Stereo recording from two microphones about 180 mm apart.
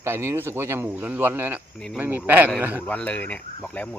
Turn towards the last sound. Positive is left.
turn(degrees=5)  # may be behind; listen again after turning